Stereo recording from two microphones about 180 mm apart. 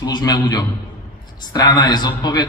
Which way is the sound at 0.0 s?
20° left (ahead or behind).